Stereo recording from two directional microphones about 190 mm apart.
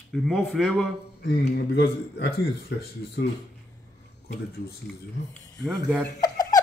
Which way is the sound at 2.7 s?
60° left (ahead or behind).